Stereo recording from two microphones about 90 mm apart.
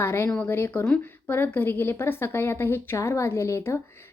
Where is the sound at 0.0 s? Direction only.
30° left (ahead or behind).